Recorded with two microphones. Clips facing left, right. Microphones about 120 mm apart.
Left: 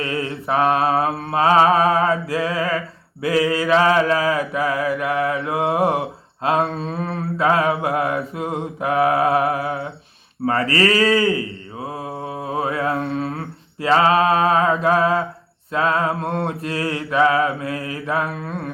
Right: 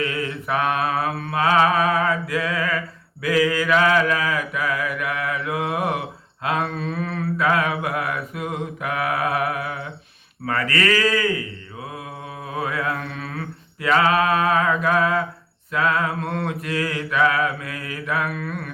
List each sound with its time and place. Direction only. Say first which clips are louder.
0.0 s mantra: left 1 dB; 30° left (ahead or behind)